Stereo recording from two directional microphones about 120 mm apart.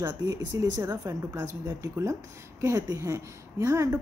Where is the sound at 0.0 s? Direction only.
30° right (ahead or behind).